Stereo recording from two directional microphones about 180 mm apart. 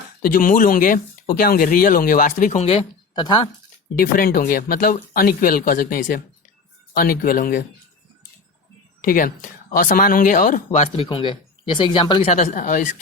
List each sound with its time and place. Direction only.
0.2 s speech: 50° left (ahead or behind); by 3.2 s 35° left (ahead or behind)
3.2 s speech: 25° left (ahead or behind)
3.9 s speech: 55° left (ahead or behind)
9.0 s speech: 50° left (ahead or behind); by 12.3 s 25° left (ahead or behind)
12.3 s speech: 45° left (ahead or behind)